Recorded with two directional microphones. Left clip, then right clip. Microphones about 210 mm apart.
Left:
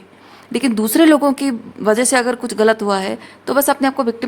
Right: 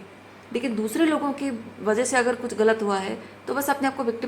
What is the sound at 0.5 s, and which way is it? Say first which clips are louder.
A woman's voice: left 10 dB; 55° left (ahead or behind).